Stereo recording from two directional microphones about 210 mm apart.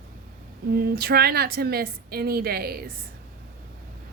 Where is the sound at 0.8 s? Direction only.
45° right (ahead or behind).